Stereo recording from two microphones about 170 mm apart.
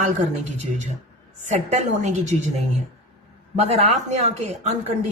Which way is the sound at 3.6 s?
40° right (ahead or behind).